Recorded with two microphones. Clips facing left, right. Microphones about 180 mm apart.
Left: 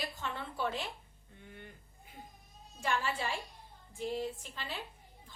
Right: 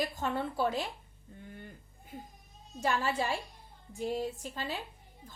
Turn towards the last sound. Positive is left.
turn(degrees=-40)  # may be behind; listen again after turning